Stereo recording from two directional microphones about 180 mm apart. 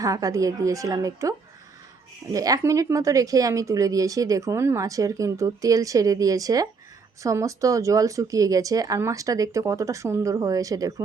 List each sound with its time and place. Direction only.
0.0 s speech: 20° right (ahead or behind)